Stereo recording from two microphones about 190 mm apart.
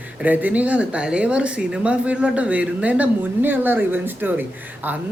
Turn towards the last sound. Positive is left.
turn(degrees=-10)  # may be behind; listen again after turning